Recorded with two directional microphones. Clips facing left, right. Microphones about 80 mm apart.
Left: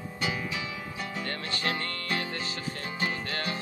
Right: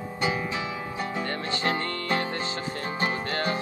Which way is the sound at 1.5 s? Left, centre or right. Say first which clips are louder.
Right 5 dB; right.